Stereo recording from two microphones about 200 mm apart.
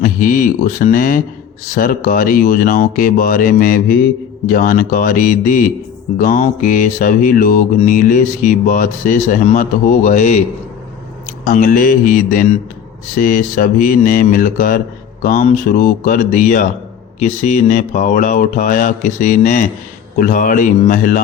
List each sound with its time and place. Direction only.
0.0 s speech: 40° left (ahead or behind)
6.1 s mantra: 40° left (ahead or behind)
11.4 s speech: 45° left (ahead or behind)
15.2 s mantra: 40° left (ahead or behind)
20.1 s speech: 45° left (ahead or behind)